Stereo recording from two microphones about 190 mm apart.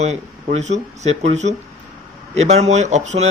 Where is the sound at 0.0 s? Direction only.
35° right (ahead or behind).